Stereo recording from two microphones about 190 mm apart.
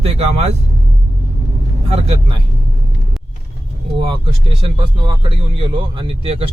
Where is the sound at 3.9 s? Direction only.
25° right (ahead or behind).